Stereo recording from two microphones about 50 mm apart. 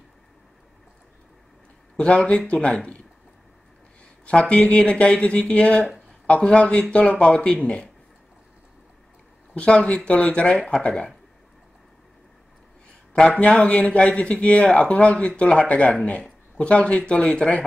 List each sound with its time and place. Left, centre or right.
2.0 s speech: left
4.3 s speech: left
9.5 s speech: left
13.4 s speech: left